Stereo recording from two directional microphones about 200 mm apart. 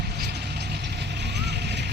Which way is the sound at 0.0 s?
55° right (ahead or behind).